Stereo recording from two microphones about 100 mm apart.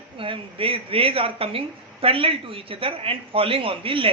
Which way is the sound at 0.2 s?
65° right (ahead or behind).